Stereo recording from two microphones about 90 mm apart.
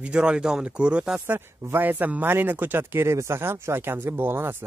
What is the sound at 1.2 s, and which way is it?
Speech, 20° right (ahead or behind).